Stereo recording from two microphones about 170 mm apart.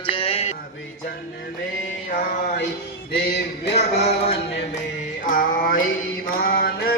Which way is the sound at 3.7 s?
40° left (ahead or behind).